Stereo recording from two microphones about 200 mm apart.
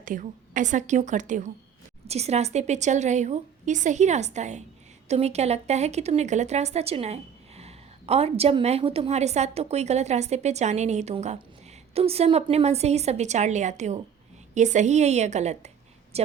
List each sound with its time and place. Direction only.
0.0 s a woman's voice: 40° right (ahead or behind)